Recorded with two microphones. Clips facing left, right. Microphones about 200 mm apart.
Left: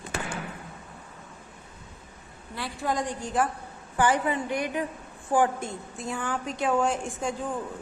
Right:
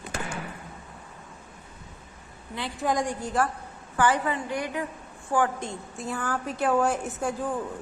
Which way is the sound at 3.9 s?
15° left (ahead or behind).